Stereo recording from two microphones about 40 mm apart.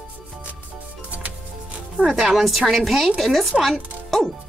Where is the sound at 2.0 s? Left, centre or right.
Centre.